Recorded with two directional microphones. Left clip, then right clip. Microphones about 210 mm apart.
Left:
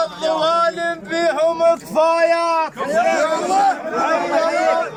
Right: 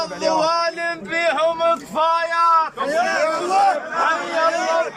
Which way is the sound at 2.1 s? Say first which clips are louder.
Left 2 dB; 25° left (ahead or behind).